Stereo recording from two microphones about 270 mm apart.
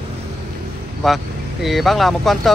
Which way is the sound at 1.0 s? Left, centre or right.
Centre.